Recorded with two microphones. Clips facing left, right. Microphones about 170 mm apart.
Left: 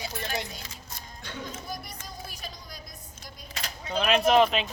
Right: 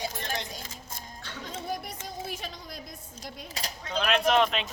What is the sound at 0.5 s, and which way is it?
Music, 45° right (ahead or behind).